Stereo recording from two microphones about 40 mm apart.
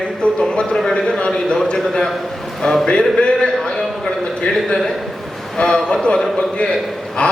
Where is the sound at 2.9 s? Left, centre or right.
Left.